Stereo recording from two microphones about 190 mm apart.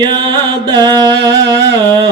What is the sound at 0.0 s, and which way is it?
Music, 25° right (ahead or behind).